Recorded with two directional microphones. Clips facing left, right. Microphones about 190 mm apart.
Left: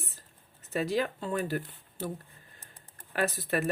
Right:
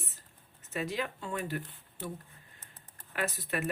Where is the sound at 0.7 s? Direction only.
35° left (ahead or behind).